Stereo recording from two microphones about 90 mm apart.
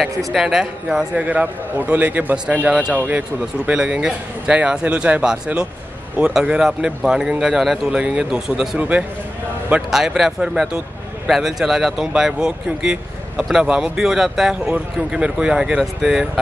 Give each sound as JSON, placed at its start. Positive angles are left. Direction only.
{"t": 0.3, "sound": "speech", "side_deg": -5}